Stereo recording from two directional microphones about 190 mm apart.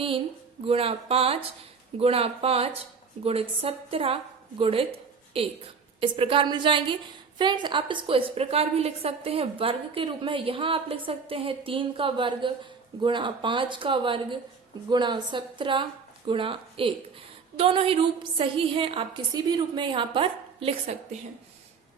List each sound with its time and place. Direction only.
0.6 s a woman's voice: 30° right (ahead or behind)